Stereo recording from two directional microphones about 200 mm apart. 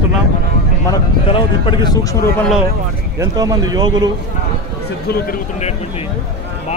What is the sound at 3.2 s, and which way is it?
Speech, 15° right (ahead or behind).